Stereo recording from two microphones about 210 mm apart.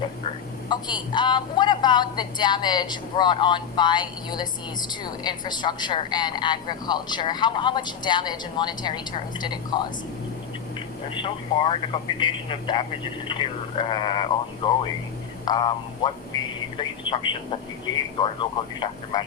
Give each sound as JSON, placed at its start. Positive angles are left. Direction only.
{"t": 0.7, "sound": "speech", "side_deg": 20}
{"t": 11.1, "sound": "speech", "side_deg": 25}